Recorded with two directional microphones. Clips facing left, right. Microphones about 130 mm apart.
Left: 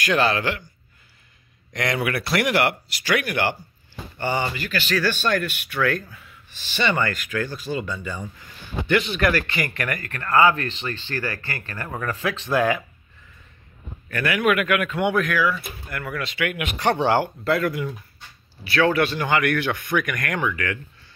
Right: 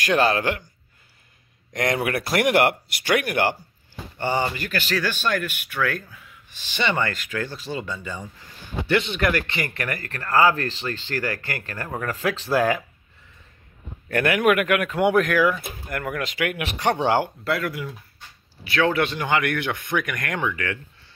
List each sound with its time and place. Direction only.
0.0 s speech: 40° right (ahead or behind)
1.7 s speech: 45° right (ahead or behind)
4.2 s speech: 30° right (ahead or behind)
4.6 s speech: 45° right (ahead or behind)
5.0 s speech: 10° right (ahead or behind); by 12.8 s 40° right (ahead or behind)
14.0 s speech: 60° right (ahead or behind); by 16.7 s 40° right (ahead or behind)
16.7 s speech: 15° right (ahead or behind)
17.5 s speech: 5° right (ahead or behind)
18.6 s speech: 20° right (ahead or behind)